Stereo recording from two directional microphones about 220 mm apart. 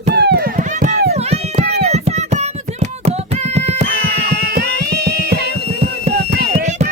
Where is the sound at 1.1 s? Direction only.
30° right (ahead or behind).